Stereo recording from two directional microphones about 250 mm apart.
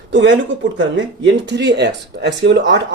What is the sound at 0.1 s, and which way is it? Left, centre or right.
Speech, right.